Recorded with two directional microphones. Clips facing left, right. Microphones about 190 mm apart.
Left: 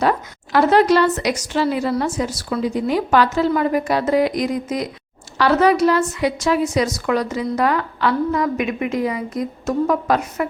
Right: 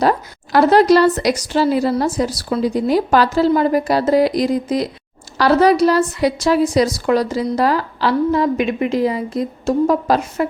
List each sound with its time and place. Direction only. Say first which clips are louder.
0.0 s a woman's voice: right 2 dB; 35° right (ahead or behind)